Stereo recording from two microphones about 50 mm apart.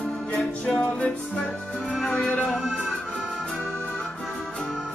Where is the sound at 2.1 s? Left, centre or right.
Left.